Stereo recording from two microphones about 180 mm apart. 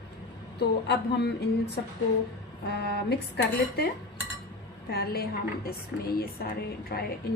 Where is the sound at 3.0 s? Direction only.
65° left (ahead or behind).